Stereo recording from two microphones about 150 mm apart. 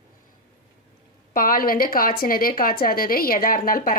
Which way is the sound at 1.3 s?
70° left (ahead or behind).